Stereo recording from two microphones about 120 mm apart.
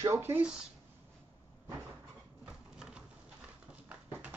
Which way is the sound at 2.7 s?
5° right (ahead or behind).